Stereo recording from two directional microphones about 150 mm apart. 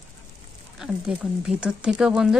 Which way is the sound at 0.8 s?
5° right (ahead or behind).